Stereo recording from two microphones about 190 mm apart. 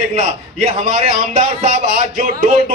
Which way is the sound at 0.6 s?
35° right (ahead or behind).